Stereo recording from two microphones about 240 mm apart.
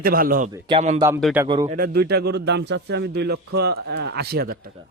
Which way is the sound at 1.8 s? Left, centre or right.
Right.